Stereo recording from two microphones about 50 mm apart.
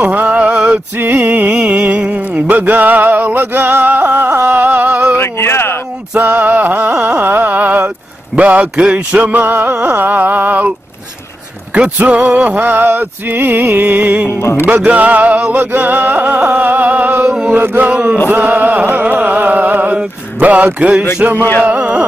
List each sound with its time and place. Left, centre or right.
0.0 s a sound: right
0.9 s music: right
5.1 s a sound: left
6.1 s music: right
6.5 s carnatic music: right
8.4 s a man's voice: right
8.7 s music: right
11.7 s music: right
17.3 s music: right
17.6 s music: right
21.4 s music: left
21.6 s music: right